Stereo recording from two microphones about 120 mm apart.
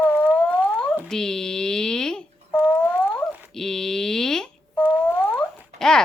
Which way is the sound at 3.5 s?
5° left (ahead or behind).